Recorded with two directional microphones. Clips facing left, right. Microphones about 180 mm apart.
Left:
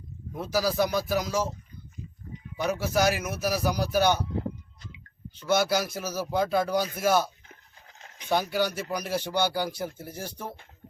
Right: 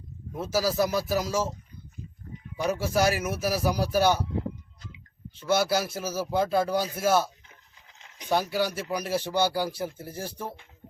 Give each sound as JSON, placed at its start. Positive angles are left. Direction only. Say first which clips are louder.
{"t": 0.3, "sound": "speech", "louder": "even", "side_deg": -5}
{"t": 2.8, "sound": "speech", "louder": "even", "side_deg": -5}
{"t": 5.5, "sound": "speech", "louder": "even", "side_deg": -5}
{"t": 6.0, "sound": "speech", "louder": "right 1 dB", "side_deg": -30}
{"t": 6.3, "sound": "speech", "louder": "even", "side_deg": -5}
{"t": 8.3, "sound": "speech", "louder": "even", "side_deg": 0}